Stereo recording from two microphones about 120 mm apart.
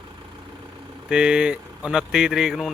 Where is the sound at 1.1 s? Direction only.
10° right (ahead or behind).